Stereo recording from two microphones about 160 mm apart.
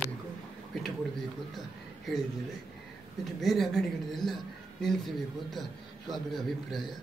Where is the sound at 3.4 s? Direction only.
Centre (ahead or behind).